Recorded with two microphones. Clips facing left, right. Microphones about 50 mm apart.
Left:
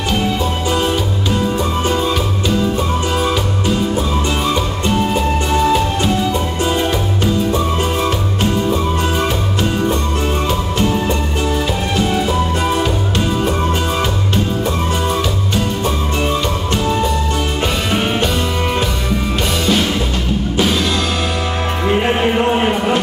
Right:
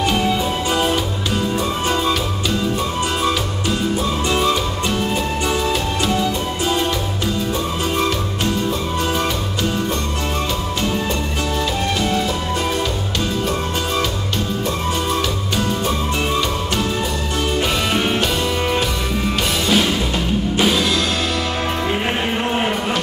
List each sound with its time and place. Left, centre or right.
0.7 s music: centre
4.8 s music: centre
19.6 s music: centre
21.8 s music: centre